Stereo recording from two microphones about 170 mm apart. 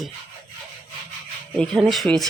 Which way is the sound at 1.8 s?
Centre (ahead or behind).